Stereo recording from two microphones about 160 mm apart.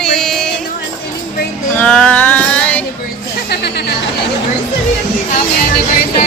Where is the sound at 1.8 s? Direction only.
5° left (ahead or behind).